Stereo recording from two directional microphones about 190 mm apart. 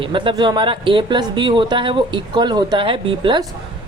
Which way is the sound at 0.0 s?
25° right (ahead or behind).